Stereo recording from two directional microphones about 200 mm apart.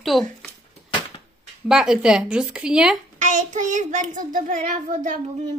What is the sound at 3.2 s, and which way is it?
A child's voice, 40° right (ahead or behind).